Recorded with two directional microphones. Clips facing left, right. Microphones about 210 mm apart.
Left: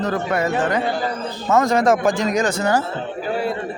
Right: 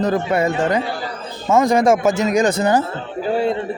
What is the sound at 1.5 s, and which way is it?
Speech, 10° right (ahead or behind).